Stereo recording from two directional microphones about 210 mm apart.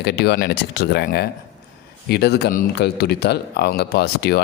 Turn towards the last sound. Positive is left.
turn(degrees=50)  # may be behind; listen again after turning